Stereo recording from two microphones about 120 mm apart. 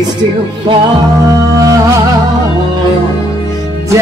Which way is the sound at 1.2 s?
30° right (ahead or behind).